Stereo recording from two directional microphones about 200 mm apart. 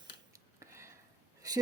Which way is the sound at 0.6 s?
15° right (ahead or behind).